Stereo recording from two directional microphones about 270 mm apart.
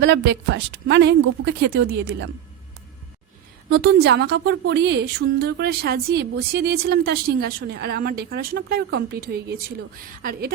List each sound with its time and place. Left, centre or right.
0.0 s a woman's voice: right
3.7 s a woman's voice: right